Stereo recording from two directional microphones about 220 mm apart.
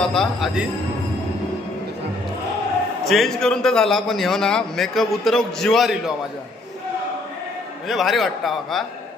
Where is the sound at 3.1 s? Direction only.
Centre (ahead or behind).